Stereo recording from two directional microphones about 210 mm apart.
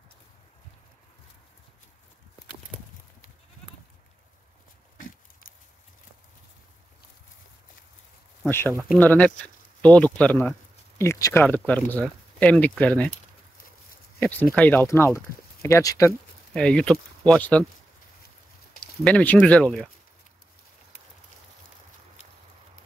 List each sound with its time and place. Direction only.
4.9 s pig: 40° left (ahead or behind)
8.5 s speech: 10° left (ahead or behind)
14.2 s speech: 5° left (ahead or behind)
16.5 s speech: 5° left (ahead or behind)
19.0 s speech: 5° left (ahead or behind)